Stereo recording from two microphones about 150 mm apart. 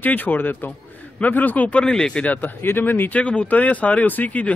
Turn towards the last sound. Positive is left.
turn(degrees=10)  # may be behind; listen again after turning